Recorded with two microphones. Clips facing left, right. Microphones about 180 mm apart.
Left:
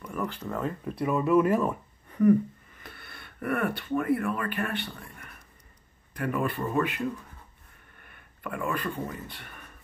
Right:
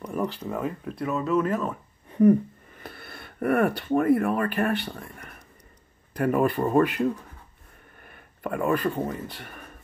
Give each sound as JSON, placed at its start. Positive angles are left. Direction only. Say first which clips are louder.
{"t": 0.0, "sound": "a sound", "louder": "right 4 dB", "side_deg": -30}
{"t": 0.4, "sound": "speech", "louder": "right 2 dB", "side_deg": -10}
{"t": 2.8, "sound": "speech", "louder": "right 6 dB", "side_deg": -40}
{"t": 4.9, "sound": "a sound", "louder": "right 5 dB", "side_deg": -45}
{"t": 6.1, "sound": "speech", "louder": "right 7 dB", "side_deg": -45}
{"t": 8.0, "sound": "speech", "louder": "right 6 dB", "side_deg": -45}